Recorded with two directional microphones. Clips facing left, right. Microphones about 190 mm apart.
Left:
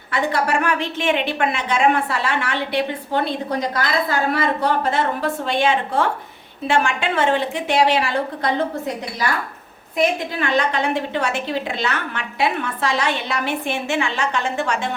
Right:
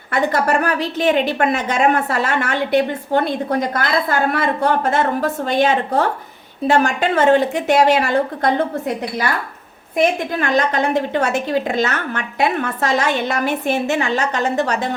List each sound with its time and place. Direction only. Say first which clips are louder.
0.1 s a woman's voice: right 3 dB; 45° right (ahead or behind)
10.3 s a woman's voice: right 3 dB; 45° right (ahead or behind)